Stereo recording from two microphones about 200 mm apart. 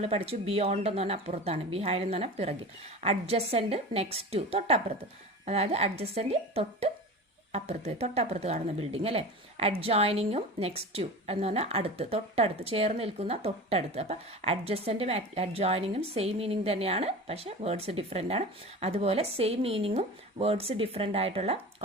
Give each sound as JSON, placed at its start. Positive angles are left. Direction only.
{"t": 0.0, "sound": "a woman's voice", "side_deg": -30}